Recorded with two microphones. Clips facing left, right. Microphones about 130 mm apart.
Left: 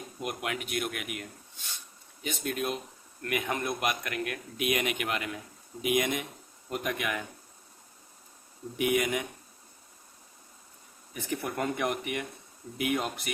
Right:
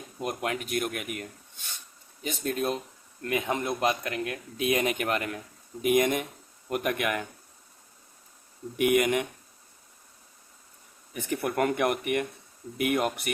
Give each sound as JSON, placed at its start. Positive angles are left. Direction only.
{"t": 0.2, "sound": "a man's voice", "side_deg": -35}
{"t": 2.2, "sound": "a man's voice", "side_deg": -35}
{"t": 3.2, "sound": "a man's voice", "side_deg": -25}
{"t": 8.8, "sound": "speech", "side_deg": -55}
{"t": 11.1, "sound": "speech", "side_deg": -55}